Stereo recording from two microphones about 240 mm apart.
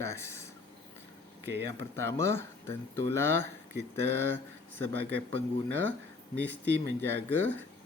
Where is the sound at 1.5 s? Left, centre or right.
Right.